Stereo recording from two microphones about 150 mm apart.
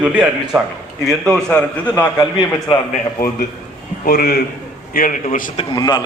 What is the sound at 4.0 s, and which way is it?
Speech, 85° left.